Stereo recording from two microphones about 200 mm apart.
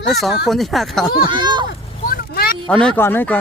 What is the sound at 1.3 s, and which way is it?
Speech, 20° right (ahead or behind).